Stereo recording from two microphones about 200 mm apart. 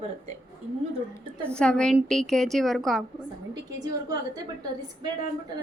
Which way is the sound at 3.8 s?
15° right (ahead or behind).